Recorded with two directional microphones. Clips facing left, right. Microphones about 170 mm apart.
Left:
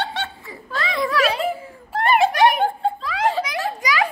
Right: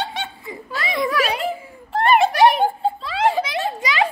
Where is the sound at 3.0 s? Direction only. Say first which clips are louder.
Right 2 dB; 30° right (ahead or behind).